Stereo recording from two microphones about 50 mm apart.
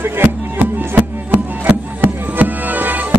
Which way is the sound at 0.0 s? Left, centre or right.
Right.